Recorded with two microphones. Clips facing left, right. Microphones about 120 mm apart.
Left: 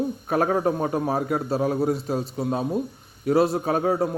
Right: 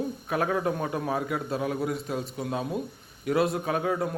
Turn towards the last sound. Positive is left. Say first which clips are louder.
# left 5 dB
turn(degrees=35)  # may be behind; listen again after turning